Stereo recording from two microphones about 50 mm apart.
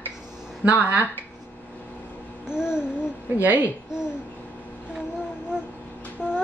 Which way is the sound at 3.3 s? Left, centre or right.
Right.